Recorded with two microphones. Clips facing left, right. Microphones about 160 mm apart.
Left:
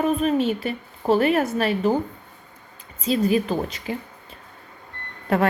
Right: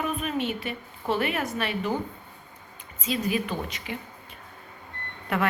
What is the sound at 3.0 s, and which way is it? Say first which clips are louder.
Speech: left 7 dB; 35° left (ahead or behind).